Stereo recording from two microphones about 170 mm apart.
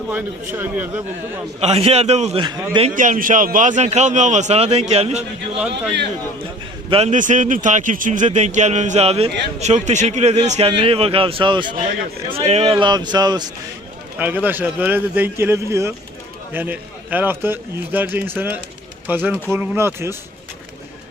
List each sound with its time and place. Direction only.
0.5 s speech: 10° right (ahead or behind)
1.6 s a man's voice: 35° right (ahead or behind)
2.4 s speech: 30° right (ahead or behind)
2.9 s a man's voice: 50° right (ahead or behind)
6.9 s a man's voice: 45° right (ahead or behind); by 13.5 s 25° right (ahead or behind)
14.2 s speech: 10° right (ahead or behind)